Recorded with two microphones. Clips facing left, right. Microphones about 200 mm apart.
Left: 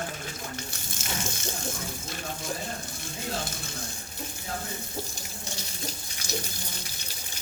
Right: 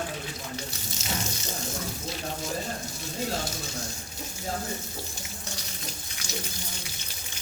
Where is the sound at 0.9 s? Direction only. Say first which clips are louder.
Right 1 dB; 50° left (ahead or behind).